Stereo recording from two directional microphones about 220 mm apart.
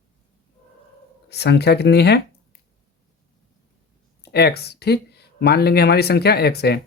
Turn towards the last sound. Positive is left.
turn(degrees=45)  # may be behind; listen again after turning